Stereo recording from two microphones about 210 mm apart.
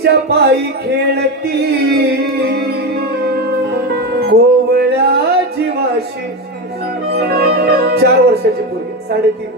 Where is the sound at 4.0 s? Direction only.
50° right (ahead or behind).